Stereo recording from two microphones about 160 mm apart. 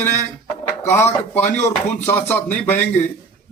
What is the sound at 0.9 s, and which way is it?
A man's voice, 15° left (ahead or behind).